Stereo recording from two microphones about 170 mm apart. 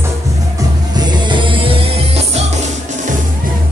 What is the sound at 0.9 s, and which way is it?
Music, 30° right (ahead or behind).